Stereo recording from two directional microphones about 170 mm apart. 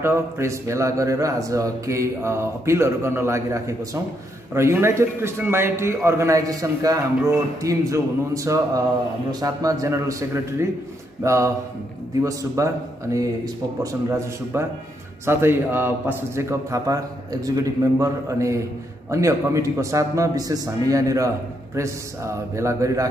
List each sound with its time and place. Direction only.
0.0 s a man's voice: 15° right (ahead or behind)